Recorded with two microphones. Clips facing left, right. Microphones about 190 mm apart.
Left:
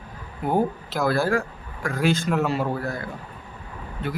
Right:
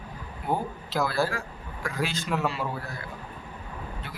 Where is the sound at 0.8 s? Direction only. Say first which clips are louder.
Left 4 dB; 50° left (ahead or behind).